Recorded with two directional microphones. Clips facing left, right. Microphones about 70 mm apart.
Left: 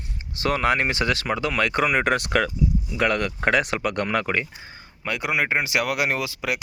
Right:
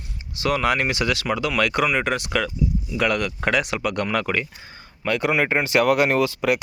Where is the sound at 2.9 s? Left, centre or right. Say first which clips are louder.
Right 1 dB; left.